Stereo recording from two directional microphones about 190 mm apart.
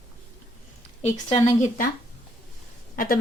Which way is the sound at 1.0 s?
35° left (ahead or behind).